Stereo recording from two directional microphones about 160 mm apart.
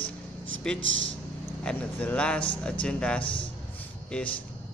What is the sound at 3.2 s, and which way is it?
Speech, 35° left (ahead or behind).